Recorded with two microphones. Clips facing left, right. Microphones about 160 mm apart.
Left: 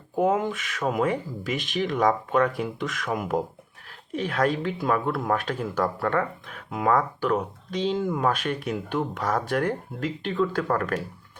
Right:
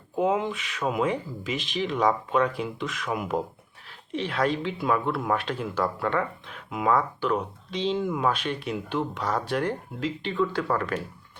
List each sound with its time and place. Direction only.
0.2 s speech: 45° left (ahead or behind)